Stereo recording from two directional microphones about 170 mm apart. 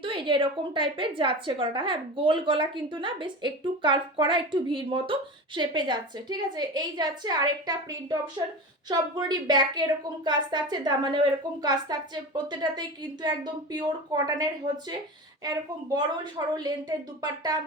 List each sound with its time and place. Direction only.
0.0 s a woman's voice: 30° right (ahead or behind)